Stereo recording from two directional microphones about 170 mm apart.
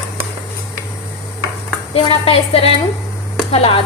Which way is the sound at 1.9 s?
30° left (ahead or behind).